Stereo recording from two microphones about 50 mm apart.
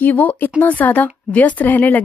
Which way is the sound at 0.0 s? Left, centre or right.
Left.